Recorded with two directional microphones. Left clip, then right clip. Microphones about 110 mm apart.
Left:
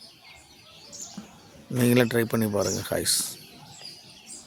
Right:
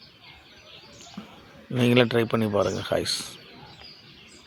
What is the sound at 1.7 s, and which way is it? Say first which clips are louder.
Speech: right 2 dB; 25° left (ahead or behind).